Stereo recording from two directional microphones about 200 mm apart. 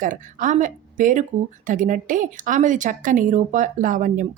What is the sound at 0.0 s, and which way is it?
A woman's voice, 40° right (ahead or behind).